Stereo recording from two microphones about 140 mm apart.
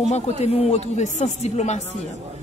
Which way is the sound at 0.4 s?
50° left (ahead or behind).